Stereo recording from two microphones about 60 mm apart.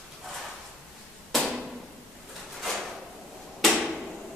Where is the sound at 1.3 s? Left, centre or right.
Centre.